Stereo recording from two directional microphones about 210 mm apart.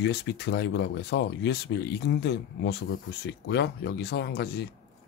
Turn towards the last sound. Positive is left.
turn(degrees=50)  # may be behind; listen again after turning